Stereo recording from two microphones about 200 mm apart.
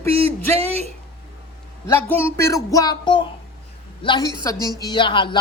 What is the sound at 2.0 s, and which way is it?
Speech, 10° left (ahead or behind).